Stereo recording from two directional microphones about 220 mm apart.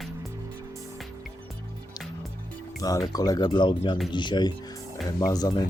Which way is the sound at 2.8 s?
15° left (ahead or behind).